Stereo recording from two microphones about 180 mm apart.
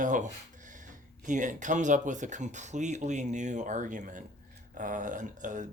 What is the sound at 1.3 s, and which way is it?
Speech, 45° right (ahead or behind).